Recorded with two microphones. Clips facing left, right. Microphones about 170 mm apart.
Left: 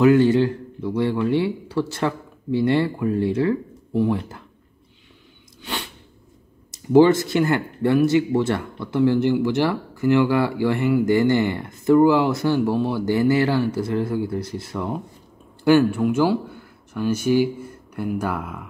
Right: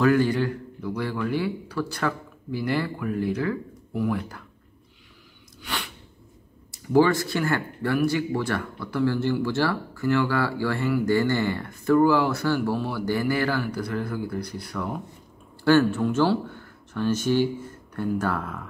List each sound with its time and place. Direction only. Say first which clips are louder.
0.0 s speech: left 6 dB; 25° left (ahead or behind)
5.6 s sneeze: left 3 dB; 25° left (ahead or behind)
6.7 s speech: left 6 dB; 20° left (ahead or behind)